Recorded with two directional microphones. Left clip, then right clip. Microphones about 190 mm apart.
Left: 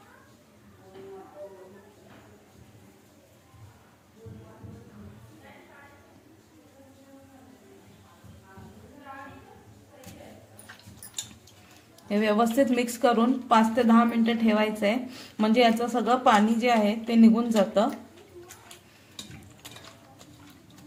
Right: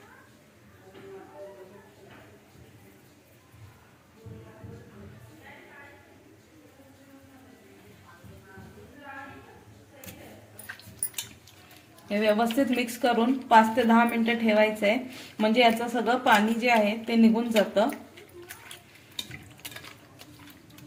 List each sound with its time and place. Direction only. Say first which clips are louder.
12.0 s speech: even; 30° left (ahead or behind)